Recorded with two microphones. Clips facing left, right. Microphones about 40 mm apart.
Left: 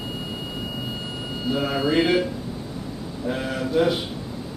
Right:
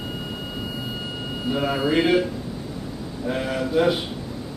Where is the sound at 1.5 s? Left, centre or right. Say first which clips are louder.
Even; centre.